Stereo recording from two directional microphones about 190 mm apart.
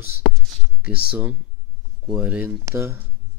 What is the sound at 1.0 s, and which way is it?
Speech, 5° right (ahead or behind).